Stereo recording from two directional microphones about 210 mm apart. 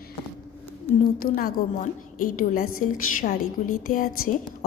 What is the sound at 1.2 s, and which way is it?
A woman's voice, 45° left (ahead or behind).